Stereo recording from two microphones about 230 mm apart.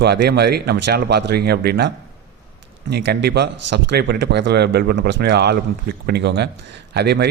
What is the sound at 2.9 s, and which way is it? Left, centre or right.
A man's voice, right.